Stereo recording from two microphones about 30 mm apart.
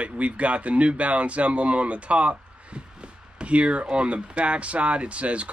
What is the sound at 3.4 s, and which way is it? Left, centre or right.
Speech, right.